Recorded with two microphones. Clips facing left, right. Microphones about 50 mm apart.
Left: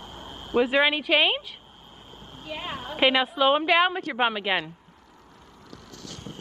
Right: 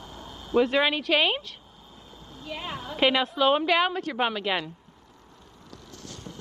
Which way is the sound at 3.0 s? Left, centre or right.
Centre.